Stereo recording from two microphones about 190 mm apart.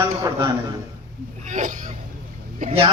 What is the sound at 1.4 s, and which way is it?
Speech, 40° right (ahead or behind).